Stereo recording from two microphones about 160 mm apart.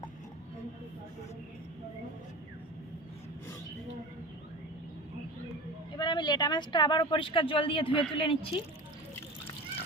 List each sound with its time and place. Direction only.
6.0 s speech: 30° left (ahead or behind)